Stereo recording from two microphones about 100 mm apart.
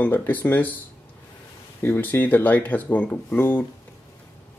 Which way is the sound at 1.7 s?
20° left (ahead or behind).